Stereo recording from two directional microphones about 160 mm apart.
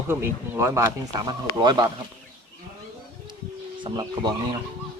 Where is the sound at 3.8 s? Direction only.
25° right (ahead or behind).